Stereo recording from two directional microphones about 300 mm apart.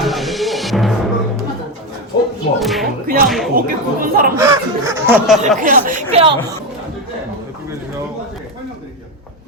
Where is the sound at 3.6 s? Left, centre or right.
Right.